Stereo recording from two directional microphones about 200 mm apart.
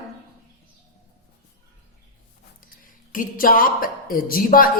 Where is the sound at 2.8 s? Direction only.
45° left (ahead or behind).